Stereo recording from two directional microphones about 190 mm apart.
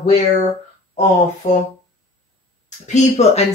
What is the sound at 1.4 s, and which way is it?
Speech, 40° left (ahead or behind).